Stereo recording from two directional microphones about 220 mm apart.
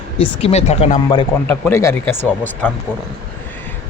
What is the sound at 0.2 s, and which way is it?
Speech, 30° left (ahead or behind).